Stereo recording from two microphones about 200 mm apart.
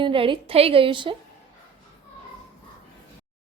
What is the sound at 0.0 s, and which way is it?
A woman's voice, 25° right (ahead or behind).